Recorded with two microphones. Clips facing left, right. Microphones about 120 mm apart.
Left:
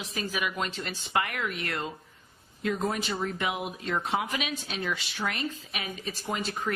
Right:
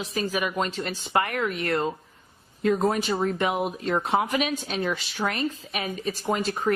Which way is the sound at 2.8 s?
40° right (ahead or behind).